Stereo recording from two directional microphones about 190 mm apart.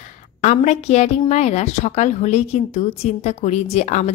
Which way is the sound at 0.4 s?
40° left (ahead or behind).